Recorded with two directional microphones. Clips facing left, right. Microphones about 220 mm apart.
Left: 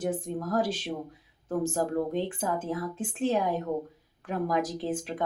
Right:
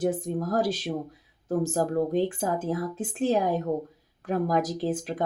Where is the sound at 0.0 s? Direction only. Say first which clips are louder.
Right 4 dB; 40° right (ahead or behind).